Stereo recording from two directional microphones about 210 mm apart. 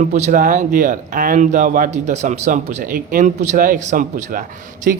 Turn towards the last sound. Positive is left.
turn(degrees=-45)  # may be behind; listen again after turning